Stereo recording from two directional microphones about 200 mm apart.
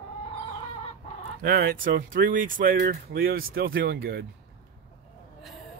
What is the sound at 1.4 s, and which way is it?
Speech, 50° right (ahead or behind).